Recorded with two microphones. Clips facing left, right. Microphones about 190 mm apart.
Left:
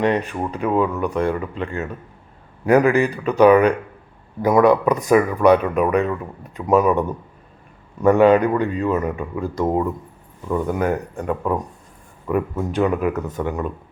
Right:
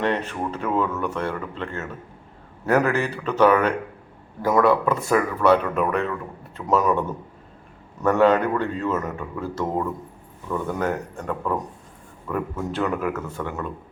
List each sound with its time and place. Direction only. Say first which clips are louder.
0.0 s speech: left 4 dB; 15° left (ahead or behind)
8.0 s speech: left 5 dB; 15° left (ahead or behind)